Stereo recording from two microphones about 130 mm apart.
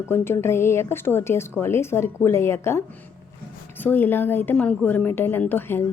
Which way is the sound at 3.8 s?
15° left (ahead or behind).